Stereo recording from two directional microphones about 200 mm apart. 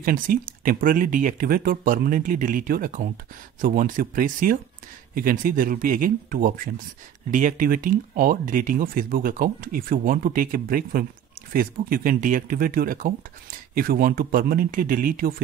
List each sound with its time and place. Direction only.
0.0 s speech: 45° right (ahead or behind)